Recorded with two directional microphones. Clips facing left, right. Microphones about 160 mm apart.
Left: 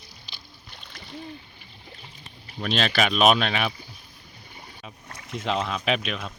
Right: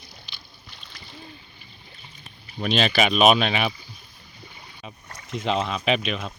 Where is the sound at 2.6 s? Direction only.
Centre (ahead or behind).